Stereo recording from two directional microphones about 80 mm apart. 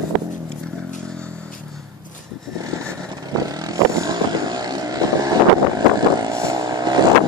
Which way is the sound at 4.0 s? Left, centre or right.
Right.